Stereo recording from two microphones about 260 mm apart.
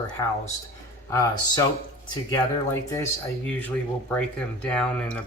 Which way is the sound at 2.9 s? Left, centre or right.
Centre.